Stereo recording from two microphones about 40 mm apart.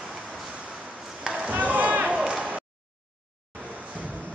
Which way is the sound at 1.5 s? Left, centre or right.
Right.